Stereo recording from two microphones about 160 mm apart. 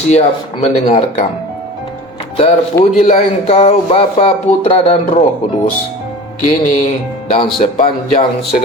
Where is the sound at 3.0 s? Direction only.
40° left (ahead or behind).